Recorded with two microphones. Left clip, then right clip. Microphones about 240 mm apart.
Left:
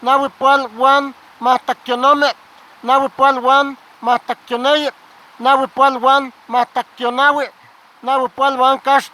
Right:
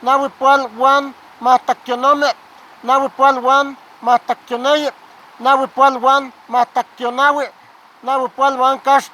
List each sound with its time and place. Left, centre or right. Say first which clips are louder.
0.0 s speech: even; left